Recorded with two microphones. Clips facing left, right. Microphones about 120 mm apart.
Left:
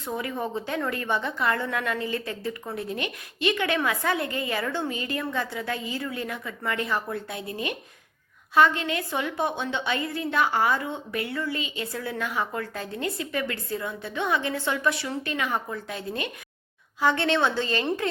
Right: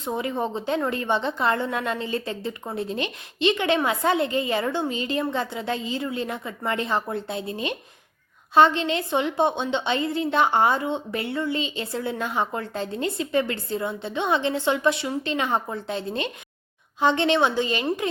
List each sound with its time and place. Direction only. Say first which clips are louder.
0.0 s a woman's voice: right 4 dB; 25° right (ahead or behind)